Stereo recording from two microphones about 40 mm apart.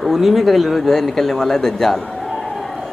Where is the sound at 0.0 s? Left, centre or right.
Centre.